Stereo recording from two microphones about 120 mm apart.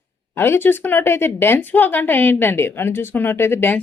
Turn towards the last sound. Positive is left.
turn(degrees=20)  # may be behind; listen again after turning